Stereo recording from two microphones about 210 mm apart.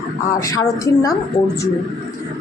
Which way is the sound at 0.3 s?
15° left (ahead or behind).